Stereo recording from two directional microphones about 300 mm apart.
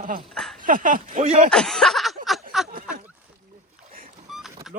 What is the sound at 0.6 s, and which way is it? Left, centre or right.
Speech, right.